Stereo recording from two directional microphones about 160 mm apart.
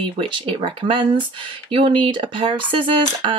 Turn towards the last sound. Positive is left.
turn(degrees=-30)  # may be behind; listen again after turning